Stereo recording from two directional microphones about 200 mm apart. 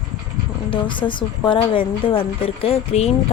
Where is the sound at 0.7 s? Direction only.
25° left (ahead or behind).